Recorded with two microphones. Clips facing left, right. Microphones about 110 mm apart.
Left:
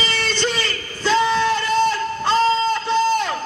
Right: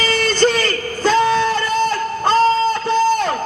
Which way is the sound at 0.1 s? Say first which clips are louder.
Right 7 dB; 45° right (ahead or behind).